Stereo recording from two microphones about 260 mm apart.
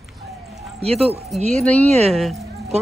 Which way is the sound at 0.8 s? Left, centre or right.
Right.